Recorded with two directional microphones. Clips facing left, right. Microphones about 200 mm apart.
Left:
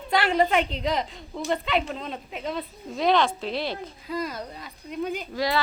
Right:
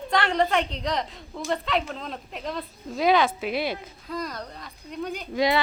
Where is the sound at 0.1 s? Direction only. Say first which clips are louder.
Left 1 dB; 5° left (ahead or behind); by 3.8 s 10° right (ahead or behind).